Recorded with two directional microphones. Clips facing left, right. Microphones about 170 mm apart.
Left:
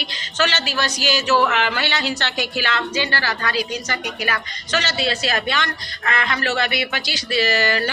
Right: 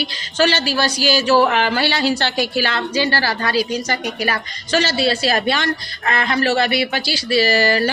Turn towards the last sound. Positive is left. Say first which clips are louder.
# right 4 dB
turn(degrees=-35)  # may be behind; listen again after turning